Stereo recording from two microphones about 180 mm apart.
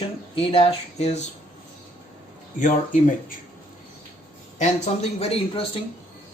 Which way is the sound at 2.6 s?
45° left (ahead or behind).